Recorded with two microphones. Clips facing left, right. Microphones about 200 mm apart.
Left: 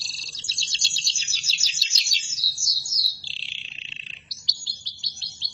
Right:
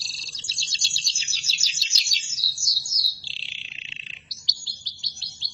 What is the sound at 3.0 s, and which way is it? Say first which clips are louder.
Bird: even; centre (ahead or behind).